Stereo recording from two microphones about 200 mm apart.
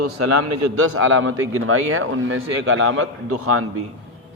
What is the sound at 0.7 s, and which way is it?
A man's voice, 90° right.